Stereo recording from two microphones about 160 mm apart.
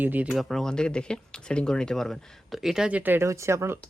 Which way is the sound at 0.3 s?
Centre (ahead or behind).